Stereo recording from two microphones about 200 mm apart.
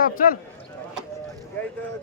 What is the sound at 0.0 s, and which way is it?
Speech, 45° left (ahead or behind).